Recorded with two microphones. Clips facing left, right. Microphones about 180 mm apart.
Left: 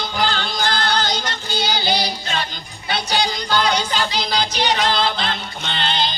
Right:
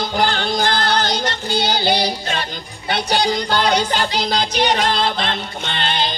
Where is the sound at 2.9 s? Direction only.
55° right (ahead or behind).